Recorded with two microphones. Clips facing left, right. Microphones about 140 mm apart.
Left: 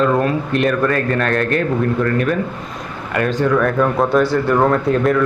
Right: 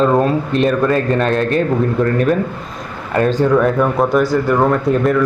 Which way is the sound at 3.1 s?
30° right (ahead or behind).